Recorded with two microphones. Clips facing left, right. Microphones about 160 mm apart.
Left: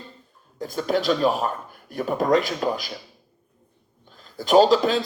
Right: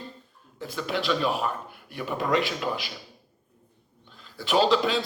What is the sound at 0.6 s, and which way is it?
Speech, 40° left (ahead or behind).